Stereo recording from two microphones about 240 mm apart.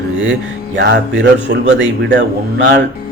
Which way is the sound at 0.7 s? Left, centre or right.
Right.